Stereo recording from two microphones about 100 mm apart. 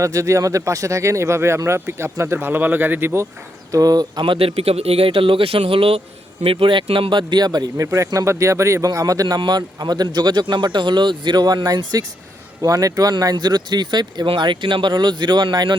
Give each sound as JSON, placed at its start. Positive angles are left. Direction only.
{"t": 0.0, "sound": "speech", "side_deg": -30}
{"t": 3.7, "sound": "speech", "side_deg": -35}
{"t": 7.9, "sound": "speech", "side_deg": -30}